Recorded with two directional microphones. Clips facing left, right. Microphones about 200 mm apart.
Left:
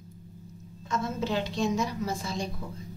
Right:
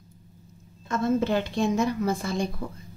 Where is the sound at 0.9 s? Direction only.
55° right (ahead or behind).